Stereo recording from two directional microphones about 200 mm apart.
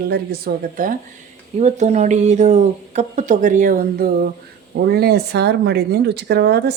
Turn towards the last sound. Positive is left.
turn(degrees=-55)  # may be behind; listen again after turning